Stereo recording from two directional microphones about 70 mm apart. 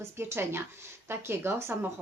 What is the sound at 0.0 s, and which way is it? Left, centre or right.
A woman's voice, right.